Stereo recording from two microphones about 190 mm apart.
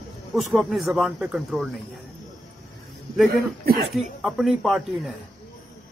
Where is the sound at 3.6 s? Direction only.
50° right (ahead or behind).